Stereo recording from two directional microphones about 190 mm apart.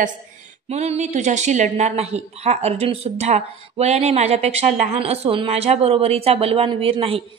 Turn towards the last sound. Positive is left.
turn(degrees=-30)  # may be behind; listen again after turning